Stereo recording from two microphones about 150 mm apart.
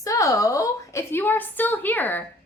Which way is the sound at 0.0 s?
20° left (ahead or behind).